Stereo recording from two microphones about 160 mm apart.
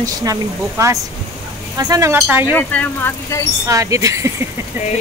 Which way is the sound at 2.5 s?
10° left (ahead or behind).